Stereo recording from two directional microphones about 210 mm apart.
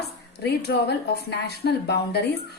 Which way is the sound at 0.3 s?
50° left (ahead or behind).